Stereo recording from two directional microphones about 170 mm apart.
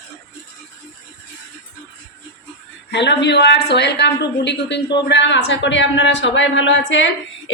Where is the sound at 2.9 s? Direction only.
90° left.